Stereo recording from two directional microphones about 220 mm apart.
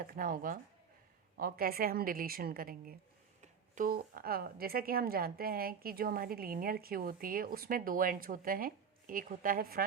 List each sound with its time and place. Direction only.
0.0 s a woman's voice: 40° right (ahead or behind)